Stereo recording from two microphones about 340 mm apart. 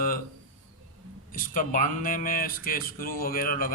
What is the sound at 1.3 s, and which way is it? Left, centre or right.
Speech, left.